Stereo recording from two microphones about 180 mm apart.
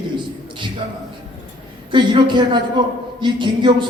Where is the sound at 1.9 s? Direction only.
25° right (ahead or behind).